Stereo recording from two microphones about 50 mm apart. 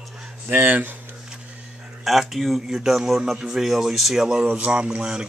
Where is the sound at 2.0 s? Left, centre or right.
Centre.